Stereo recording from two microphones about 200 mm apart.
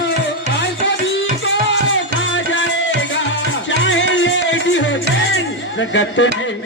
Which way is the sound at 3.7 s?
65° left (ahead or behind).